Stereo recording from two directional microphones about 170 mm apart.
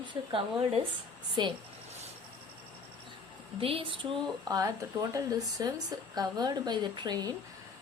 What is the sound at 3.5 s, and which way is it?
Speech, 35° right (ahead or behind).